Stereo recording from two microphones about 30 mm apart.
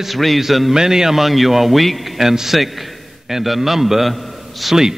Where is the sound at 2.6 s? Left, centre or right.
Centre.